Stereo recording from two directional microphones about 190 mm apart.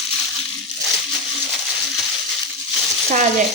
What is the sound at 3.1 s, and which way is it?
Frying, 40° right (ahead or behind).